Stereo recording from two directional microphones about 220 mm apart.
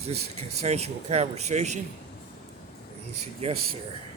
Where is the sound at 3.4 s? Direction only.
30° right (ahead or behind).